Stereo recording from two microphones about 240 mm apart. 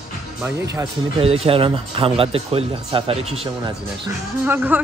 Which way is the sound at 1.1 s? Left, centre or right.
Right.